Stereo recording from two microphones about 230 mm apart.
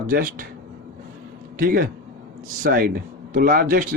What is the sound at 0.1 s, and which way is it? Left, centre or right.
Speech, right.